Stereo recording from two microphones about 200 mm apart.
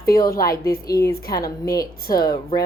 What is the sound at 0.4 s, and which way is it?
A woman's voice, 15° left (ahead or behind).